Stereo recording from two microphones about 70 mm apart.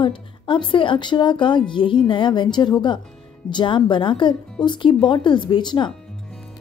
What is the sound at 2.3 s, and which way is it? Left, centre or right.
Speech, left.